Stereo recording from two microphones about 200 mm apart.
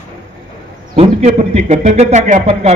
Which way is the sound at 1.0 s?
35° right (ahead or behind).